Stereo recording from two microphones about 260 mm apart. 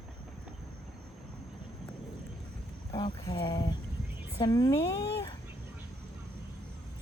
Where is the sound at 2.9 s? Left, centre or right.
Centre.